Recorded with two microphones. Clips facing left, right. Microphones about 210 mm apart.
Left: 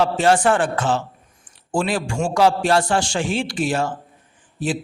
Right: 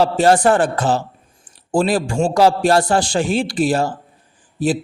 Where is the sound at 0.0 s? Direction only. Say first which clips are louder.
Right 3 dB; 40° right (ahead or behind).